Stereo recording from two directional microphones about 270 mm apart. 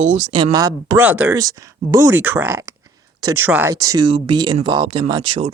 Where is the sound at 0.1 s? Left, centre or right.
Right.